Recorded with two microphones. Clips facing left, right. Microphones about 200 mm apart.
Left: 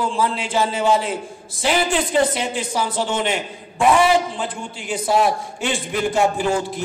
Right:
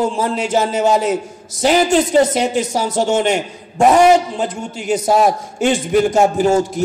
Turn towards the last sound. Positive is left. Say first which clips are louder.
# right 7 dB
turn(degrees=-40)  # may be behind; listen again after turning